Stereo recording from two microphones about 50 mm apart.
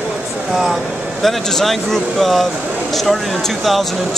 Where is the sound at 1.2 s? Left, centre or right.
Centre.